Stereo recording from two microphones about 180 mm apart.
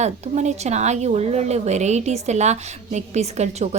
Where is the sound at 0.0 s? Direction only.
40° right (ahead or behind).